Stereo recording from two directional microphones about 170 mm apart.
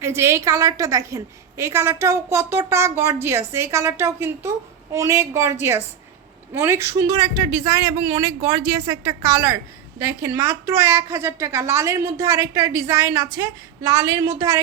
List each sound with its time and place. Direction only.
0.0 s a woman's voice: 15° right (ahead or behind)